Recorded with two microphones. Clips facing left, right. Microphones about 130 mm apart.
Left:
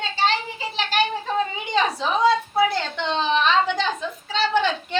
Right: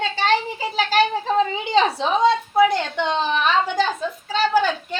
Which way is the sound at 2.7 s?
15° right (ahead or behind).